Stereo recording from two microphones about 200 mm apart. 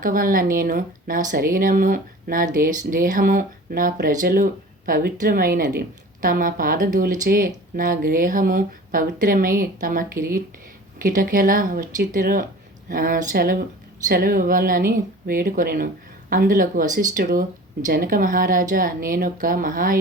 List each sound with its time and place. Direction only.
0.0 s speech: 45° right (ahead or behind)